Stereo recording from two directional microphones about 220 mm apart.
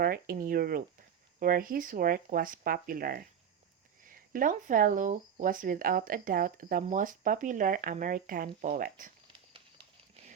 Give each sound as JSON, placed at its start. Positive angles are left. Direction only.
{"t": 0.0, "sound": "speech", "side_deg": -40}